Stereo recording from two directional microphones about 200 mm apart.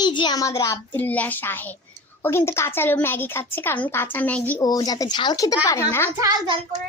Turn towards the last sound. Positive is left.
turn(degrees=-20)  # may be behind; listen again after turning